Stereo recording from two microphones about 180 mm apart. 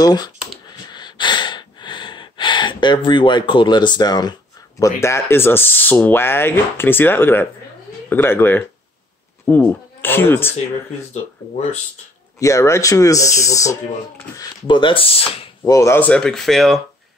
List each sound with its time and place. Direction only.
0.0 s speech: 20° left (ahead or behind)
12.4 s speech: 15° left (ahead or behind)
15.7 s speech: 15° left (ahead or behind)